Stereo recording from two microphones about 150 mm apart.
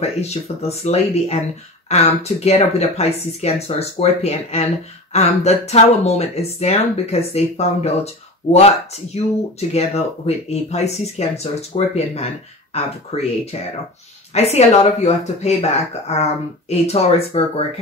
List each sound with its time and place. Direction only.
0.0 s speech: 45° left (ahead or behind)